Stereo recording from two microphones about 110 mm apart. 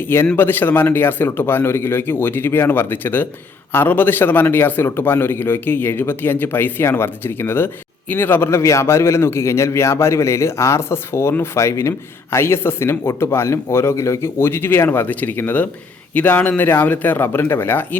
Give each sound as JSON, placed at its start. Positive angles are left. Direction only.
{"t": 0.0, "sound": "a man's voice", "side_deg": 20}